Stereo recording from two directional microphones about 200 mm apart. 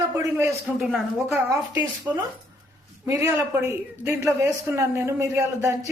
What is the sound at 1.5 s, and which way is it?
A man's voice, 10° right (ahead or behind).